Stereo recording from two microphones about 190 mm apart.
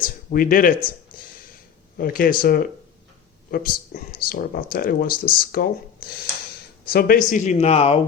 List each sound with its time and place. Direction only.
0.0 s speech: 45° left (ahead or behind)
1.1 s a sound: 50° left (ahead or behind)
2.0 s speech: 50° left (ahead or behind); by 7.9 s 30° left (ahead or behind)